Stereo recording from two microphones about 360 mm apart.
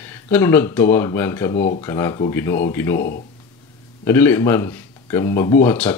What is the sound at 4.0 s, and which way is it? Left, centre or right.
Speech, centre.